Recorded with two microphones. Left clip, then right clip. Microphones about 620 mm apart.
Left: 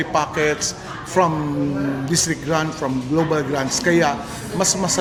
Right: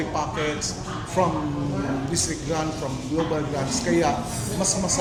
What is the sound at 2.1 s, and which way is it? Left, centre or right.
Speech, left.